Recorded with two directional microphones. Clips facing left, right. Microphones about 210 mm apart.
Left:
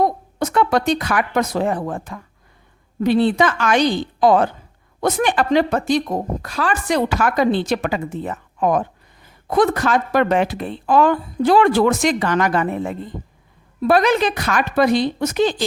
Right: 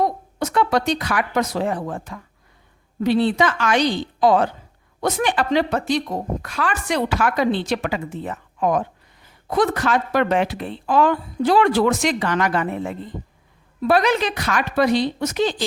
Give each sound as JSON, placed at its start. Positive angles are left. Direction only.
{"t": 0.0, "sound": "a woman's voice", "side_deg": 50}